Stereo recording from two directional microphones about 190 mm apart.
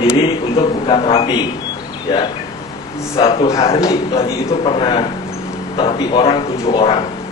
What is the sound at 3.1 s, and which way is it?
Speech, 30° left (ahead or behind).